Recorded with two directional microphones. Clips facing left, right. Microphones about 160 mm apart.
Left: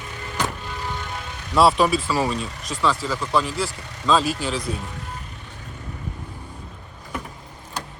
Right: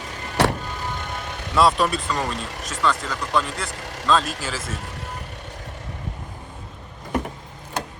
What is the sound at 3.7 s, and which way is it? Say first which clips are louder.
Speech: right 3 dB; 90° right.